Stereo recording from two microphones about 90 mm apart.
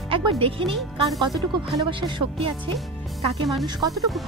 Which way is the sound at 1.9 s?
70° right (ahead or behind).